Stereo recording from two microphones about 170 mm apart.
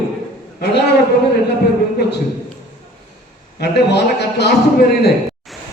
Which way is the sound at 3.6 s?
75° left (ahead or behind).